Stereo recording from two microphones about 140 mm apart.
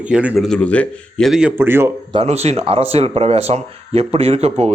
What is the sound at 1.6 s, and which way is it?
Speech, 15° right (ahead or behind).